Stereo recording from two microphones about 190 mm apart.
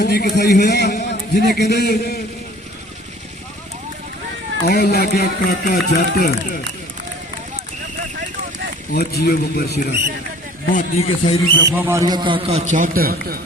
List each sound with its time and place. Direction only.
0.0 s a man's voice: 55° left (ahead or behind)
4.7 s speech: 55° left (ahead or behind)
9.0 s speech: 55° left (ahead or behind)
10.7 s speech: 45° left (ahead or behind)
11.6 s a man's voice: 15° right (ahead or behind)
12.7 s a man's voice: 45° right (ahead or behind)